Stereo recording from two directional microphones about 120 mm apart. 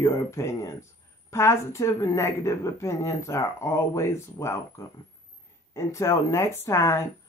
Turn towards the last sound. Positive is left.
turn(degrees=25)  # may be behind; listen again after turning